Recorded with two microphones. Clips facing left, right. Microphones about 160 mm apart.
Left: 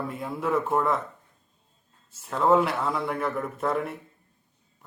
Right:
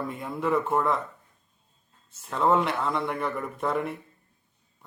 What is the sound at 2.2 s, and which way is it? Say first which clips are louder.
A man's voice: left 2 dB; centre (ahead or behind).